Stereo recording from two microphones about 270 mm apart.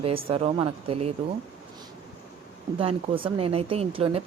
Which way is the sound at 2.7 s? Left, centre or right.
Centre.